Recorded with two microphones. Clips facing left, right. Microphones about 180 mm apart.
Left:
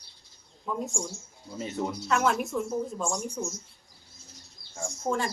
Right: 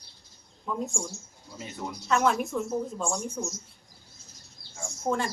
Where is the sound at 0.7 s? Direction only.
Centre (ahead or behind).